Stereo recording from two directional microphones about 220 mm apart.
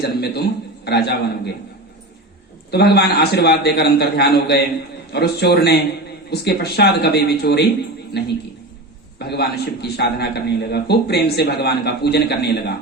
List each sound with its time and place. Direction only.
0.0 s a sound: 45° left (ahead or behind)
0.9 s a man's voice: 45° left (ahead or behind)
2.6 s a man's voice: 50° left (ahead or behind)